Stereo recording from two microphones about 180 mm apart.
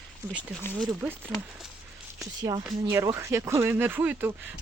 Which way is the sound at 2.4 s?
20° right (ahead or behind).